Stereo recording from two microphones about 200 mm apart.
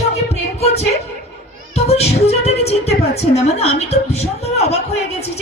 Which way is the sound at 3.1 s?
30° left (ahead or behind).